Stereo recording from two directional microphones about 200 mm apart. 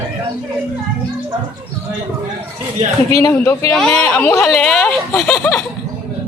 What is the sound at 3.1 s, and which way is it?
Speech, 15° left (ahead or behind).